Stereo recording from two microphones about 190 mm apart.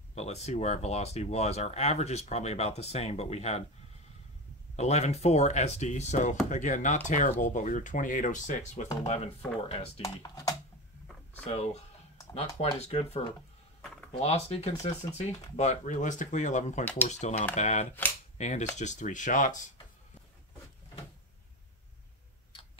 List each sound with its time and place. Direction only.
0.1 s speech: 35° left (ahead or behind)
4.7 s speech: 35° left (ahead or behind)
10.0 s speech: 20° left (ahead or behind)
11.4 s speech: 35° left (ahead or behind)
14.2 s speech: 35° left (ahead or behind)